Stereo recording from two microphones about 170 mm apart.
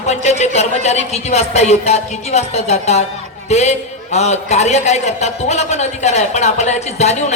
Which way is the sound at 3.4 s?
40° left (ahead or behind).